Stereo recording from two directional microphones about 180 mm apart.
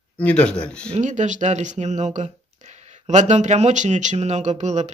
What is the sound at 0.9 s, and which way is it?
Speech, 45° right (ahead or behind).